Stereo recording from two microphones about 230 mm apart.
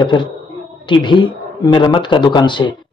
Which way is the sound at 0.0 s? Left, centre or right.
Left.